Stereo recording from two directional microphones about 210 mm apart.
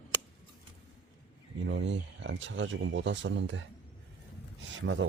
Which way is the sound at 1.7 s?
60° right (ahead or behind).